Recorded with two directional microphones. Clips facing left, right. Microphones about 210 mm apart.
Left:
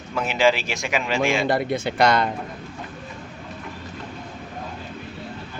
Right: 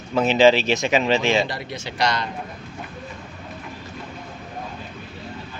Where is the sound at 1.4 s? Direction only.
55° left (ahead or behind).